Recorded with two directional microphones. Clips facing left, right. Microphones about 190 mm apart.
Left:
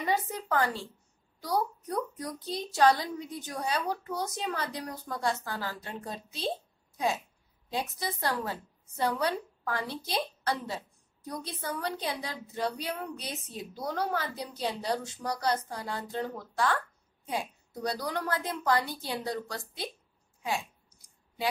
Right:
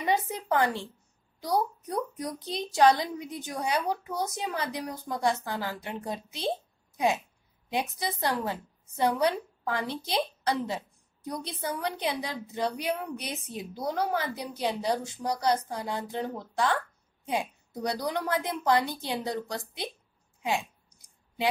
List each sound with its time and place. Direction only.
0.0 s a woman's voice: 20° right (ahead or behind)
7.7 s a woman's voice: 20° right (ahead or behind)